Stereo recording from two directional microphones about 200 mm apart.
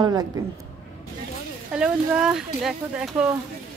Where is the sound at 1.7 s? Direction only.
5° right (ahead or behind).